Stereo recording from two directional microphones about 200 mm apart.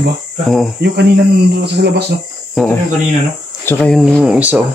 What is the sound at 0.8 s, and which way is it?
Speech, 55° right (ahead or behind).